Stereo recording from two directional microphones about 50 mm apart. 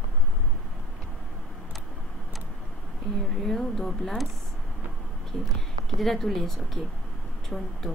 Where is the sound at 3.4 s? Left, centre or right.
Centre.